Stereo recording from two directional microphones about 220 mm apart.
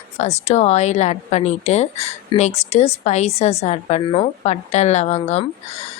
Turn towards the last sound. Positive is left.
turn(degrees=30)  # may be behind; listen again after turning